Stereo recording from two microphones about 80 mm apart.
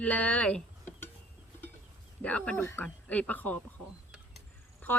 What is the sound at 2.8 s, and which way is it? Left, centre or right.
Speech, centre.